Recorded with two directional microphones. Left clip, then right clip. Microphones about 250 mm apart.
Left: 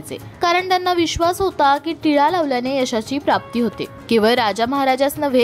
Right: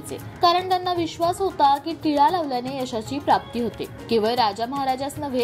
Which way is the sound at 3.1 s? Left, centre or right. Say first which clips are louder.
Left 2 dB; left.